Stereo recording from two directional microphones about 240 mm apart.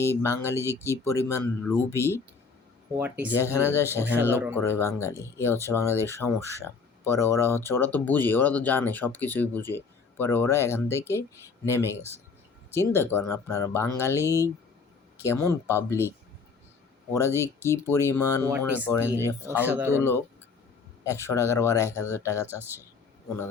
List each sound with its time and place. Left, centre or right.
0.0 s speech: centre
0.6 s speech: centre
1.3 s speech: centre
3.0 s speech: centre
3.3 s speech: centre
4.0 s speech: centre
4.6 s speech: centre
17.2 s speech: centre
18.4 s speech: centre
18.9 s speech: centre
19.5 s speech: centre
20.0 s speech: centre